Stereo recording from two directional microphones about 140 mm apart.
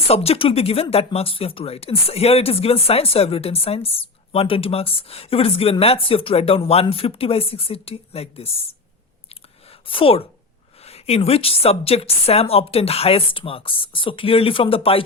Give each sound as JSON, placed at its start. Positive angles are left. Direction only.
{"t": 0.1, "sound": "speech", "side_deg": 45}
{"t": 9.8, "sound": "a woman's voice", "side_deg": 40}